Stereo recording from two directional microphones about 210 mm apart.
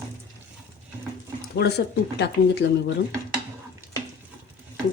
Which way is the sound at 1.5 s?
50° left (ahead or behind).